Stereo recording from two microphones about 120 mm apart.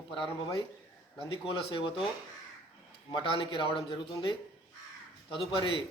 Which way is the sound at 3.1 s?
45° left (ahead or behind).